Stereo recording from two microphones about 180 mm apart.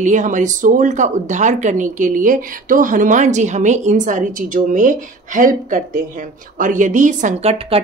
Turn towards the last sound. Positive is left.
turn(degrees=-40)  # may be behind; listen again after turning